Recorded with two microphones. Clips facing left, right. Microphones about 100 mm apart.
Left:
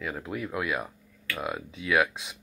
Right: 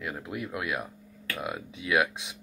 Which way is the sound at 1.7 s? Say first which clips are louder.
Left 1 dB; 10° right (ahead or behind).